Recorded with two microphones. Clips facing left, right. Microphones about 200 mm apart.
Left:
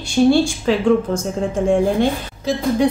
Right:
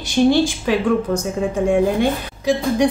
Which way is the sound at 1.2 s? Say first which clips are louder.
Even; 10° right (ahead or behind).